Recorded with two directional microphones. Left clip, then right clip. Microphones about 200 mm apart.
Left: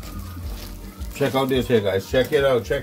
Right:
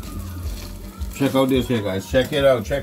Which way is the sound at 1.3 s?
50° left (ahead or behind).